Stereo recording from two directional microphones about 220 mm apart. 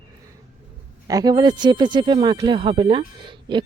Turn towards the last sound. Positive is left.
turn(degrees=-20)  # may be behind; listen again after turning